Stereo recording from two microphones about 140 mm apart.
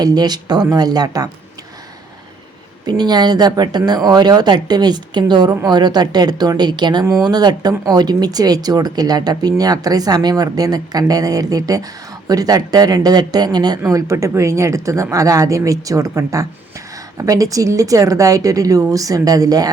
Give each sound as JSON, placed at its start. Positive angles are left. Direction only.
{"t": 0.0, "sound": "speech", "side_deg": -30}
{"t": 2.8, "sound": "speech", "side_deg": -30}